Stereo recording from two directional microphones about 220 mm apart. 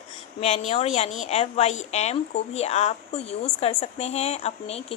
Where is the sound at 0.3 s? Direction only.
30° left (ahead or behind).